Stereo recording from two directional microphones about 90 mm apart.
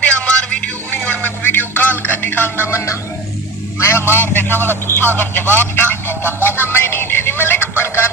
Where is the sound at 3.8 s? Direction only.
30° left (ahead or behind).